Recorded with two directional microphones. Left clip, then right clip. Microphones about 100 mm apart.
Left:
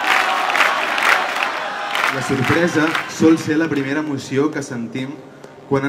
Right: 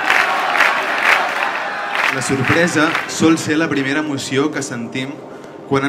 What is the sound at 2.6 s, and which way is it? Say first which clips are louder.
Speech: right 2 dB; 20° right (ahead or behind).